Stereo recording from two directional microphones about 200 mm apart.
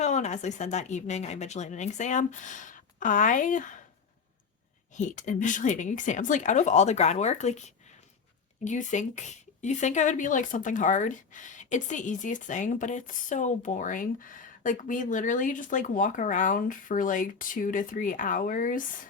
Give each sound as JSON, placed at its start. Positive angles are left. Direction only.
{"t": 0.0, "sound": "speech", "side_deg": 35}
{"t": 4.9, "sound": "speech", "side_deg": 40}
{"t": 8.6, "sound": "speech", "side_deg": 40}